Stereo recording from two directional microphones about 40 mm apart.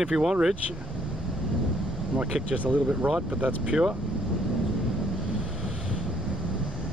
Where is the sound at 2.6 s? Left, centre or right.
Right.